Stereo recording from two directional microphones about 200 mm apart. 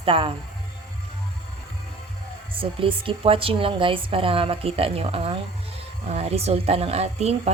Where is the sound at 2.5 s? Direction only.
25° right (ahead or behind).